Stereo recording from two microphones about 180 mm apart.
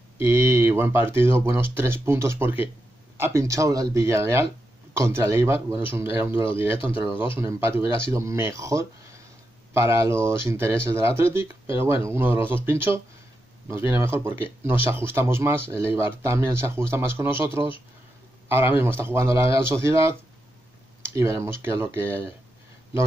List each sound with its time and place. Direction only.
0.2 s speech: 15° right (ahead or behind)
18.5 s speech: 10° right (ahead or behind)